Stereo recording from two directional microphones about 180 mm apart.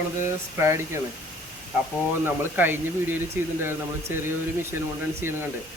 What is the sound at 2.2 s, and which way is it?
Speech, 10° right (ahead or behind).